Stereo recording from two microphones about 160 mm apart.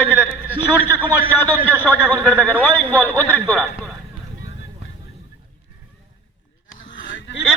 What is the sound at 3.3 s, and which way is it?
Speech, 10° right (ahead or behind).